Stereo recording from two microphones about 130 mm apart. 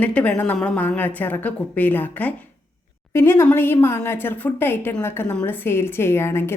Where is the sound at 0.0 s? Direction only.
10° left (ahead or behind).